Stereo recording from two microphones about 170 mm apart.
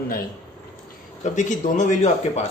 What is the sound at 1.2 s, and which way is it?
Speech, 45° left (ahead or behind).